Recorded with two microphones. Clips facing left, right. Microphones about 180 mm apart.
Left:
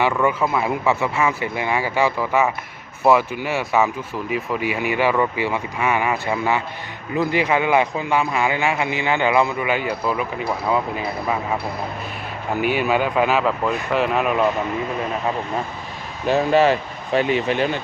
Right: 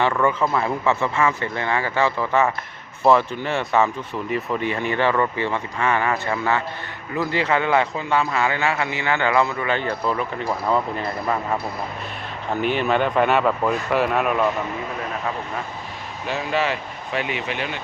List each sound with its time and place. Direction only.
0.0 s speech: 5° left (ahead or behind)
12.5 s speech: 10° left (ahead or behind)
16.2 s speech: 40° left (ahead or behind)